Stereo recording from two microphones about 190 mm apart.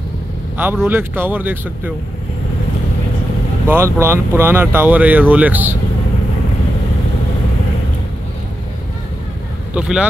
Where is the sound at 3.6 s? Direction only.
15° right (ahead or behind).